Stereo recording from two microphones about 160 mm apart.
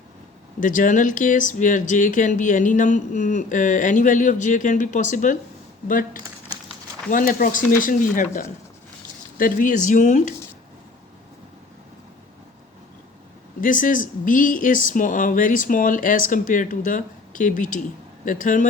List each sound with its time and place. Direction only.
0.6 s speech: 55° left (ahead or behind)
7.1 s speech: 55° left (ahead or behind)
13.6 s speech: 55° left (ahead or behind)